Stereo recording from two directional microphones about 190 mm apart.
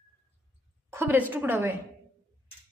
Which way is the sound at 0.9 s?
10° right (ahead or behind).